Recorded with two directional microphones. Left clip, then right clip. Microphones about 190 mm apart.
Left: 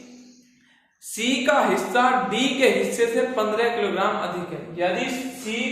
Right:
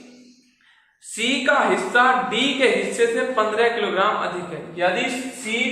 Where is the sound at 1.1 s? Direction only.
30° left (ahead or behind).